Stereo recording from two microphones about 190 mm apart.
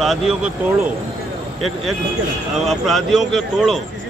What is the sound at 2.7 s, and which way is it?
Speech, centre (ahead or behind).